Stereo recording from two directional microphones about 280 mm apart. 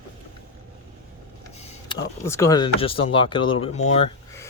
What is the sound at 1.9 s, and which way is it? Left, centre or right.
Speech, centre.